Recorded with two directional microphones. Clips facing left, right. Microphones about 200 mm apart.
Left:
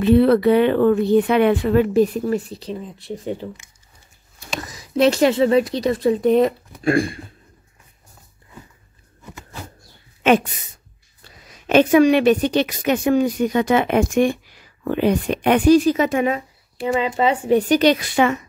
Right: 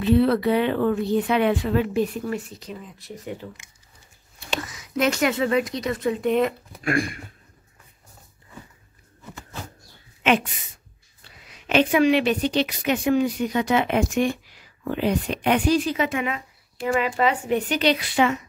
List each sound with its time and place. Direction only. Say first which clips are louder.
0.0 s speech: left 5 dB; 60° left (ahead or behind)
2.0 s speech: left 7 dB; 35° left (ahead or behind)
4.6 s speech: left 7 dB; 35° left (ahead or behind)
10.2 s a sound: left 5 dB; 45° left (ahead or behind)
11.2 s a woman's voice: left 6 dB; 40° left (ahead or behind)
16.3 s speech: left 4 dB; 25° left (ahead or behind); by 18.4 s 50° left (ahead or behind)